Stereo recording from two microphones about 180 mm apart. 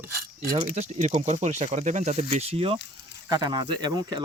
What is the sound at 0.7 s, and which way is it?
Speech, 40° right (ahead or behind).